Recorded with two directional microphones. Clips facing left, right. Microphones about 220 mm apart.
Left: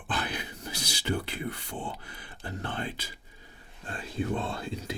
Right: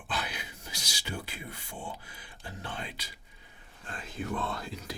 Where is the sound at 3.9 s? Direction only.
35° left (ahead or behind).